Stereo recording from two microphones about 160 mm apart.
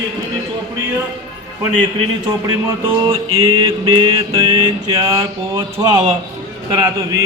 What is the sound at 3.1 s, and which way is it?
Mantra, 25° right (ahead or behind).